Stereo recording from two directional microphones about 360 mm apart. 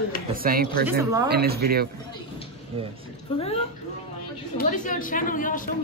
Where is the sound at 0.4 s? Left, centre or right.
Right.